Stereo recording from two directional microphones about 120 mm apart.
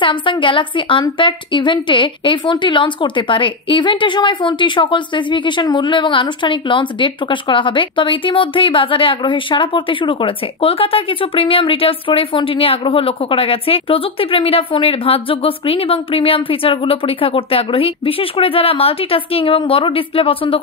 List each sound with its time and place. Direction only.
0.0 s a woman's voice: 45° left (ahead or behind)